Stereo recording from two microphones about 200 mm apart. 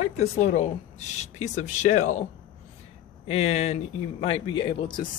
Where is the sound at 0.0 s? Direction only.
35° left (ahead or behind).